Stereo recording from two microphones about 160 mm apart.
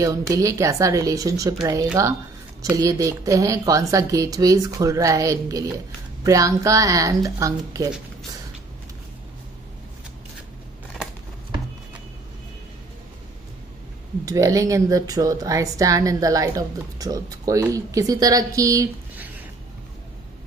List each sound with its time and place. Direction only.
0.0 s speech: 20° right (ahead or behind)
14.2 s speech: 20° right (ahead or behind)